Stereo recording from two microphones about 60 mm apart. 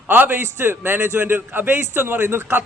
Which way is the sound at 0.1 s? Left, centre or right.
Right.